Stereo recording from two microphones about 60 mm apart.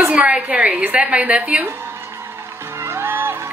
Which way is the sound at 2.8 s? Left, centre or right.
Right.